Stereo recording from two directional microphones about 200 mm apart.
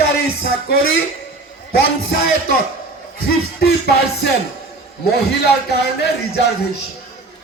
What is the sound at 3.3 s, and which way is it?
Music, 50° left (ahead or behind).